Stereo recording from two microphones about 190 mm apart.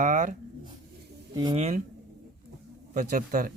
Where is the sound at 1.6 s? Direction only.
35° right (ahead or behind).